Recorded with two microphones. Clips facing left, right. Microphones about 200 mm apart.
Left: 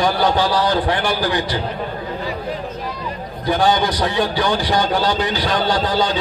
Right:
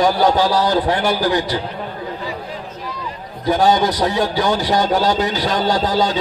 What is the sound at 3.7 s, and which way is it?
A man's voice, 40° right (ahead or behind).